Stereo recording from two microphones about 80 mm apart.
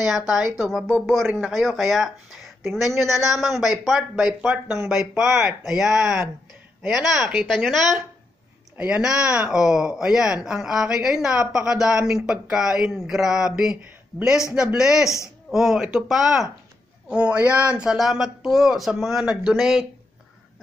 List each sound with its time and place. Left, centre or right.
0.6 s speech: centre
4.1 s speech: centre
8.7 s speech: centre
17.1 s speech: centre